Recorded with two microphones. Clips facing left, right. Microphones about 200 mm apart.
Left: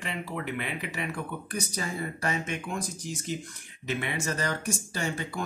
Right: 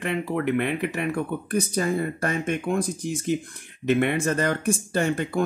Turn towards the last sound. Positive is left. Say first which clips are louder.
# right 9 dB
turn(degrees=-55)  # may be behind; listen again after turning